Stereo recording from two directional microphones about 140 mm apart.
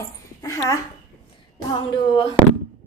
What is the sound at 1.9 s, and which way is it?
Speech, 35° left (ahead or behind).